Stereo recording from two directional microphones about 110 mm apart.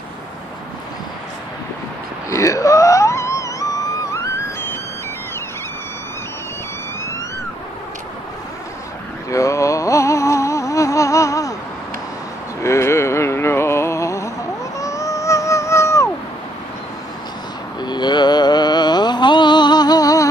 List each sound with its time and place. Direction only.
2.2 s wail: 30° left (ahead or behind)
9.3 s music: 30° left (ahead or behind)
12.6 s music: 25° left (ahead or behind)
14.8 s a sound: 30° left (ahead or behind)
17.7 s mantra: 40° left (ahead or behind)